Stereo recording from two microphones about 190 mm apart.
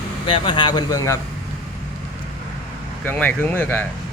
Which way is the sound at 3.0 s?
10° left (ahead or behind).